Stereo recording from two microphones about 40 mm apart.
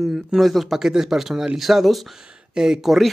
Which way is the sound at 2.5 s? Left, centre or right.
Centre.